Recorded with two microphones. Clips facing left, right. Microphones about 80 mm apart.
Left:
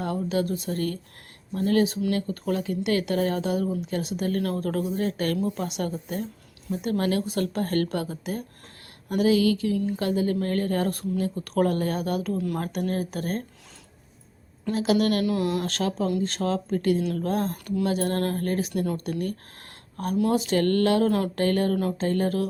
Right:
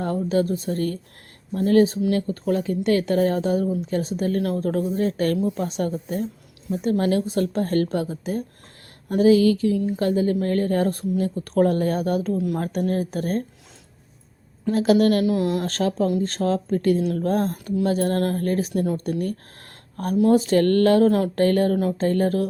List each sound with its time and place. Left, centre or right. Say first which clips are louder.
0.0 s a woman's voice: right 4 dB; right
14.6 s speech: right 5 dB; right
15.2 s a woman's voice: right 3 dB; right
15.6 s speech: right 4 dB; right
20.3 s speech: right 6 dB; right